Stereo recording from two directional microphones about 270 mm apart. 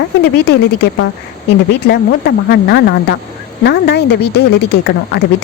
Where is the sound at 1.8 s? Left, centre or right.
Left.